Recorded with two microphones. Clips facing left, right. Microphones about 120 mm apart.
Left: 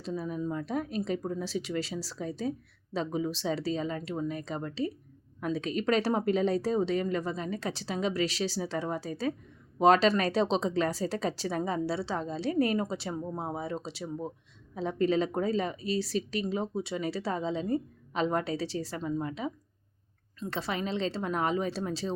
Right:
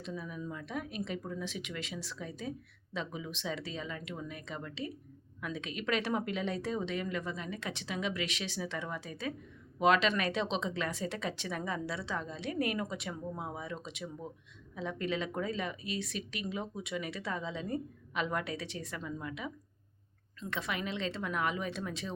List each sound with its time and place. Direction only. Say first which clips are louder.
0.0 s a woman's voice: left 7 dB; 35° left (ahead or behind)
20.5 s a woman's voice: left 4 dB; 30° left (ahead or behind)